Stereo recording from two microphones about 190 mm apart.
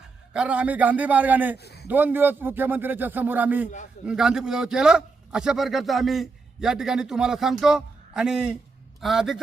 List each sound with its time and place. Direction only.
0.0 s a man's voice: 5° right (ahead or behind)
1.5 s speech: 60° left (ahead or behind)
1.9 s a man's voice: 10° right (ahead or behind)